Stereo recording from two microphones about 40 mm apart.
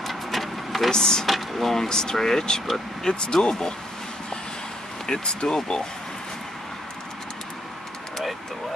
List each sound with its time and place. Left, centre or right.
0.0 s a sound: centre
0.9 s speech: centre
1.2 s speech: centre
5.0 s speech: centre